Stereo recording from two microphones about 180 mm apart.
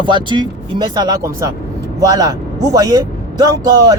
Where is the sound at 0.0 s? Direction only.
25° right (ahead or behind).